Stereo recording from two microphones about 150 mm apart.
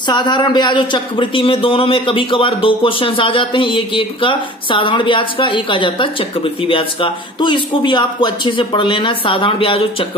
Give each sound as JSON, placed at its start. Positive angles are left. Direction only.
{"t": 0.0, "sound": "a man's voice", "side_deg": 30}